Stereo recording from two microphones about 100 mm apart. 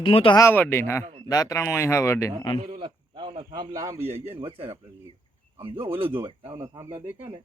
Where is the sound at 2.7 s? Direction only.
55° right (ahead or behind); by 3.9 s 40° right (ahead or behind).